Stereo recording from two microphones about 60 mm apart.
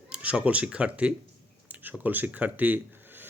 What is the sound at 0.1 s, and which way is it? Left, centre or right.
Speech, centre.